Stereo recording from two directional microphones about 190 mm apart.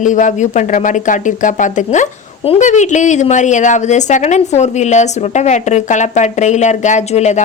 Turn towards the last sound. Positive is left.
turn(degrees=35)  # may be behind; listen again after turning